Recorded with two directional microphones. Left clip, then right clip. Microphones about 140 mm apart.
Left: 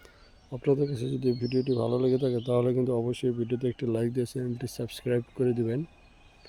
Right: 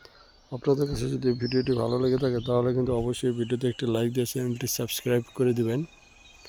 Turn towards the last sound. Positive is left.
turn(degrees=0)  # may be behind; listen again after turning